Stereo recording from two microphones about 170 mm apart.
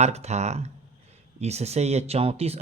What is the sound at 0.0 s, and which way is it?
Speech, 40° right (ahead or behind).